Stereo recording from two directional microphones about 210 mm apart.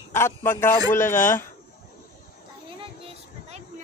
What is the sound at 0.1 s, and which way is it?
A man's voice, 10° left (ahead or behind).